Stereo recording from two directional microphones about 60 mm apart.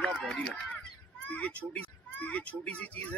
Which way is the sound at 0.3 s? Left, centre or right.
Centre.